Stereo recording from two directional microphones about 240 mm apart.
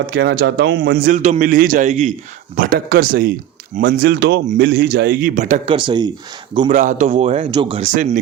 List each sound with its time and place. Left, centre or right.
0.1 s a man's voice: right; by 6.1 s centre
6.7 s speech: right
7.9 s a man's voice: right